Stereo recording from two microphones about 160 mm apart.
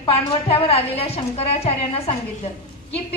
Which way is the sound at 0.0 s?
35° left (ahead or behind).